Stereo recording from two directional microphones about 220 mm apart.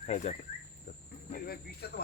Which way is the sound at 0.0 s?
30° left (ahead or behind).